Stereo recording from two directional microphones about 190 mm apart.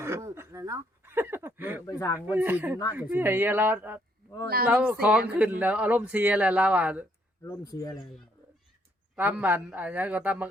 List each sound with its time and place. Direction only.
0.0 s a sound: 15° right (ahead or behind)
1.9 s speech: 15° left (ahead or behind)
2.1 s speech: 10° right (ahead or behind)
7.4 s speech: 15° left (ahead or behind)
9.1 s speech: 10° right (ahead or behind)